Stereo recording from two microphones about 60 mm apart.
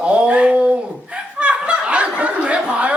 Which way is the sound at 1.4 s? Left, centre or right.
Centre.